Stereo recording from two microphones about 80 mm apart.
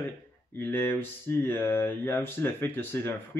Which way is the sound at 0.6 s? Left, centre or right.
Left.